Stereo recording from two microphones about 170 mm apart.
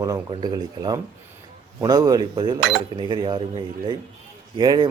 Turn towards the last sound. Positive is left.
turn(degrees=-25)  # may be behind; listen again after turning